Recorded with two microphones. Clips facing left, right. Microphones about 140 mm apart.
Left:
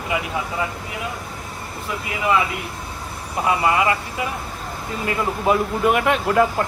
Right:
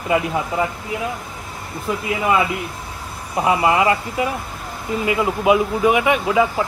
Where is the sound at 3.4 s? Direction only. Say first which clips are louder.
Right 3 dB; 20° right (ahead or behind).